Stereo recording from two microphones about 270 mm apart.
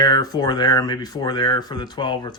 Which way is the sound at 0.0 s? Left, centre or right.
Centre.